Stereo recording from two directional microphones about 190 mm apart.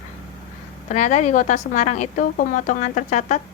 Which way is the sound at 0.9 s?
40° left (ahead or behind).